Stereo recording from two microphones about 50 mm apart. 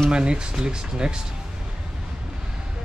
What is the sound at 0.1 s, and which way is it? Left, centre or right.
A man's voice, centre.